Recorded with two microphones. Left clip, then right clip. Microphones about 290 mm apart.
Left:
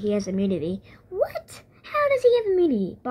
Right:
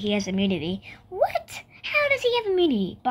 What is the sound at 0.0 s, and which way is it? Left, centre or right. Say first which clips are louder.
A woman's voice: left 1 dB; centre.